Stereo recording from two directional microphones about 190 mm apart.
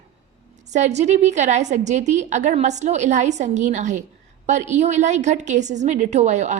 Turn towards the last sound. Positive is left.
turn(degrees=-40)  # may be behind; listen again after turning